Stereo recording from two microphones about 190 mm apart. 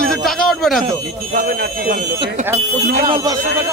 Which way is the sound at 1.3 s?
50° right (ahead or behind).